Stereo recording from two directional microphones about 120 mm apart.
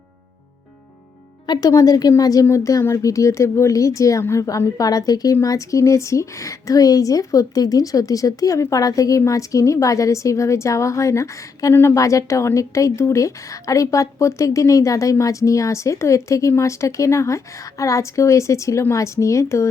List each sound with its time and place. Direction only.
1.5 s speech: 30° left (ahead or behind)